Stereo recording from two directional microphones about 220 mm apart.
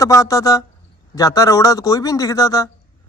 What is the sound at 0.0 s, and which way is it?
Speech, 15° left (ahead or behind).